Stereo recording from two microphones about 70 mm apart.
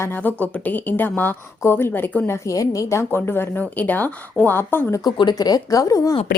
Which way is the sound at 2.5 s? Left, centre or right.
Left.